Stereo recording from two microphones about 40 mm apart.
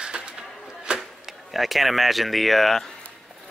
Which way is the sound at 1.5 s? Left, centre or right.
Centre.